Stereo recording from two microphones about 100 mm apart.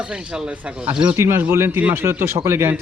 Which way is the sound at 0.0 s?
10° right (ahead or behind).